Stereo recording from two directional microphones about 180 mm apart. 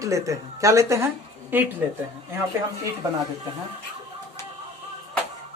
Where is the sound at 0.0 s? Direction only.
15° right (ahead or behind).